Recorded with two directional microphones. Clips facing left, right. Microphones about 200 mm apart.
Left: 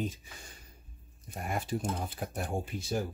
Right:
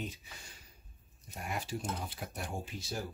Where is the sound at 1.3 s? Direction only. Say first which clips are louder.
Left 5 dB; 50° left (ahead or behind).